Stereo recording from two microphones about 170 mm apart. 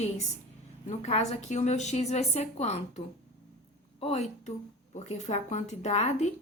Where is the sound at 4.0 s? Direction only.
40° left (ahead or behind).